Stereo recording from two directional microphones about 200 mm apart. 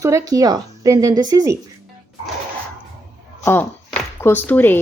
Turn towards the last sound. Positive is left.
turn(degrees=10)  # may be behind; listen again after turning